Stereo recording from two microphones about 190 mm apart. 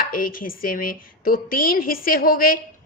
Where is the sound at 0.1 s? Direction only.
50° left (ahead or behind).